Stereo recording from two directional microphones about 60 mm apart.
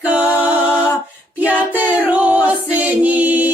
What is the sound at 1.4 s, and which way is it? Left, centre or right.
Music, right.